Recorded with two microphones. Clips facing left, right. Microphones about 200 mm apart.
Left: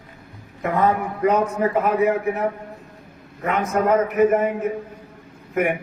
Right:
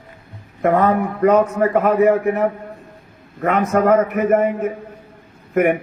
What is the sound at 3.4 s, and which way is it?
A man's voice, 60° right (ahead or behind).